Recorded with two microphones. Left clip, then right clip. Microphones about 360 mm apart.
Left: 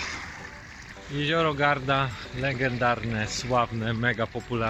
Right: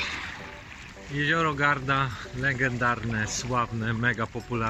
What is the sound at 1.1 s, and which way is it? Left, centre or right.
Speech, centre.